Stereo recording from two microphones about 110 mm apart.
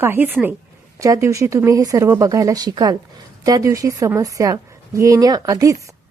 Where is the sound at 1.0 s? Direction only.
30° right (ahead or behind).